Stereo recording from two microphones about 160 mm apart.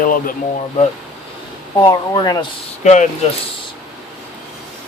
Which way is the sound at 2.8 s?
50° left (ahead or behind).